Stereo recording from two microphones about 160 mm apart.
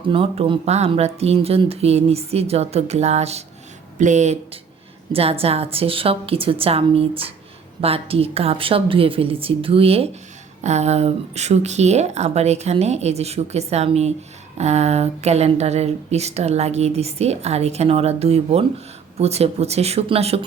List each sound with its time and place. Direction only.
0.1 s speech: 35° right (ahead or behind)
5.1 s speech: 35° right (ahead or behind)